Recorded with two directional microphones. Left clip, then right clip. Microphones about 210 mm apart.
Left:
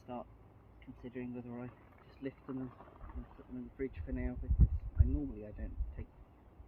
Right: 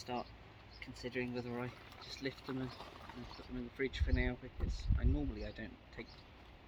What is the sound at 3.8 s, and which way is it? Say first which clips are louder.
Speech: right 4 dB; 15° right (ahead or behind).